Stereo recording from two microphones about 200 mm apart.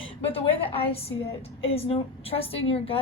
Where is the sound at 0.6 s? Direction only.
30° left (ahead or behind).